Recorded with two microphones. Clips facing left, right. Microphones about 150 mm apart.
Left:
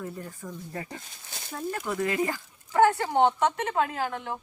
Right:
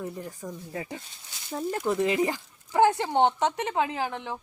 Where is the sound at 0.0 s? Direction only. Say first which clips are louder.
Right 2 dB; 15° right (ahead or behind).